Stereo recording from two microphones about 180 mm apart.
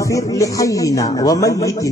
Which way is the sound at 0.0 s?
20° left (ahead or behind).